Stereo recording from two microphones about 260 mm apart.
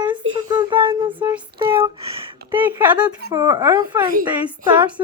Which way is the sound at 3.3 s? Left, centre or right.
Centre.